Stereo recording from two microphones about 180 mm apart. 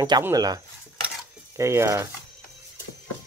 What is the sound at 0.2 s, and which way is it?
Speech, 20° right (ahead or behind).